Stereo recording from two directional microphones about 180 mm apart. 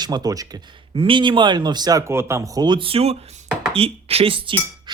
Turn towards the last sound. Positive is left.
turn(degrees=-30)  # may be behind; listen again after turning